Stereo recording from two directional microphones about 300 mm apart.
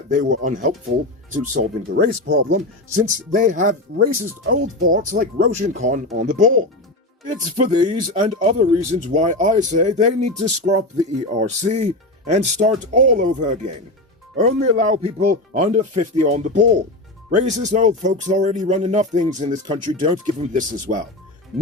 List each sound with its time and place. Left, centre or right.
0.1 s speech: right
7.7 s speech: centre
21.5 s speech: centre